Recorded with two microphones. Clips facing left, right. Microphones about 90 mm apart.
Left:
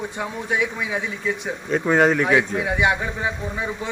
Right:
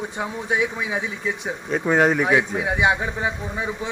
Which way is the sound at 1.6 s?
5° right (ahead or behind).